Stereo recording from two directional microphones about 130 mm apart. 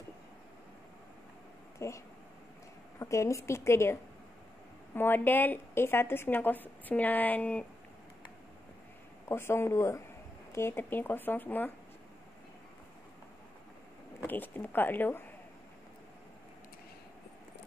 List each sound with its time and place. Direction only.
1.8 s speech: 20° left (ahead or behind)
3.0 s a woman's voice: 25° left (ahead or behind)
9.3 s a woman's voice: 20° left (ahead or behind)
14.2 s a woman's voice: 15° left (ahead or behind)